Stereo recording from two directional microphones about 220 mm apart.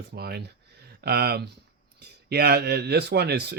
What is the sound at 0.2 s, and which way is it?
Speech, 45° right (ahead or behind).